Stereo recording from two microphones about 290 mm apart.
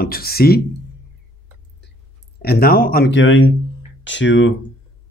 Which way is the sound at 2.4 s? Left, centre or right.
Left.